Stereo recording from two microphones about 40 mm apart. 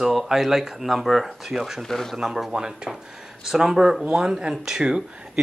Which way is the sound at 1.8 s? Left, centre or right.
Centre.